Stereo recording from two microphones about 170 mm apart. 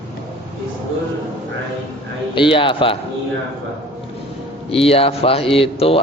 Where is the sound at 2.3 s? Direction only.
30° left (ahead or behind).